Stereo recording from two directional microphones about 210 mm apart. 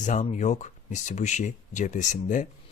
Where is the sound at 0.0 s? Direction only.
35° left (ahead or behind).